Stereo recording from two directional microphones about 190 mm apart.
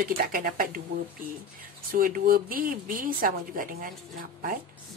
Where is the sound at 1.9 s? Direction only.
50° right (ahead or behind).